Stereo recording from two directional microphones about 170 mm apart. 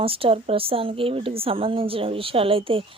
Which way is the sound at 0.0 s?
35° right (ahead or behind).